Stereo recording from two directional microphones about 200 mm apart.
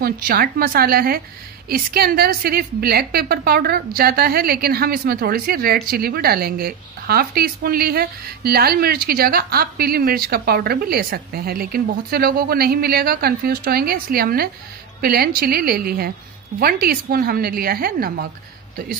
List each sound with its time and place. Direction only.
0.0 s a woman's voice: 45° right (ahead or behind)